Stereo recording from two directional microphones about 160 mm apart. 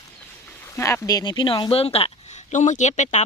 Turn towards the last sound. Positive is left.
turn(degrees=45)  # may be behind; listen again after turning